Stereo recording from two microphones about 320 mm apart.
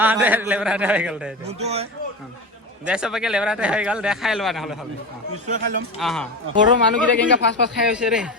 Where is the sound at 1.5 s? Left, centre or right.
Centre.